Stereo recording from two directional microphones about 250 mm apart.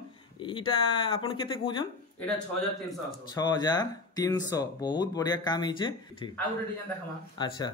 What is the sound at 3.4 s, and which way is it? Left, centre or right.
Speech, centre.